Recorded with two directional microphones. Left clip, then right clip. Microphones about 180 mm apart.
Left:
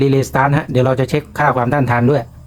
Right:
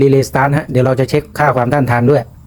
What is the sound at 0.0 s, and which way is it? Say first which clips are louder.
Speech: right 3 dB; 15° right (ahead or behind).